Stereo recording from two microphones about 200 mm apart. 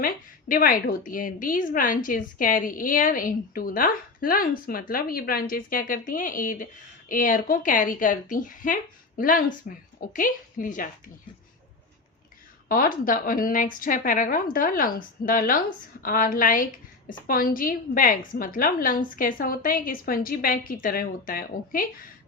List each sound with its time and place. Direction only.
0.0 s a woman's voice: 45° left (ahead or behind)
12.6 s a woman's voice: 45° left (ahead or behind)